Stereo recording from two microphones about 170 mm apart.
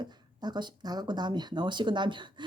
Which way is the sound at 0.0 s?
25° right (ahead or behind).